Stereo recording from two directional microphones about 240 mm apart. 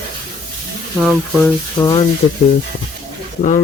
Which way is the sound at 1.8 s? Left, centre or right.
Left.